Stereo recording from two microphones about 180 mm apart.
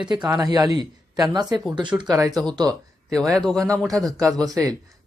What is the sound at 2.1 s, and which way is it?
Speech, 20° right (ahead or behind).